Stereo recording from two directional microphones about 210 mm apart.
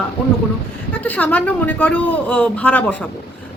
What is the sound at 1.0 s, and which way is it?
A man's voice, 5° left (ahead or behind).